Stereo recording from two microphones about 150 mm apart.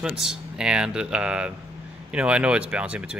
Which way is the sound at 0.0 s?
5° right (ahead or behind).